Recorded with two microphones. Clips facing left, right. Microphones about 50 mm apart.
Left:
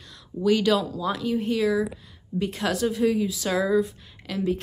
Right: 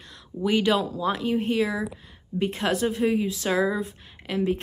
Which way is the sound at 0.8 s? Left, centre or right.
Right.